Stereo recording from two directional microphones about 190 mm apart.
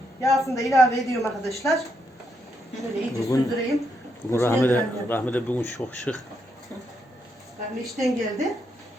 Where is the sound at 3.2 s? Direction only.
15° left (ahead or behind).